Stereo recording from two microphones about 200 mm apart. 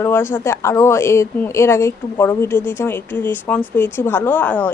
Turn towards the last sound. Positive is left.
turn(degrees=10)  # may be behind; listen again after turning